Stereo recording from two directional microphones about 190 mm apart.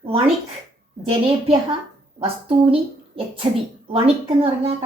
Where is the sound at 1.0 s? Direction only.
30° right (ahead or behind).